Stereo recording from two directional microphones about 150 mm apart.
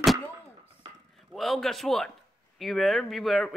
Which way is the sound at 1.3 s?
Centre (ahead or behind).